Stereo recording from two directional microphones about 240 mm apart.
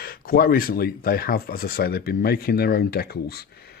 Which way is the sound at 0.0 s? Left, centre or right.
Left.